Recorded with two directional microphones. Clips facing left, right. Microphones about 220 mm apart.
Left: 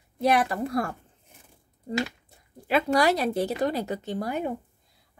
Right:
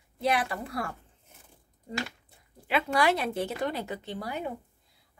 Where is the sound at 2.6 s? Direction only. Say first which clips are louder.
Left 4 dB; 40° left (ahead or behind).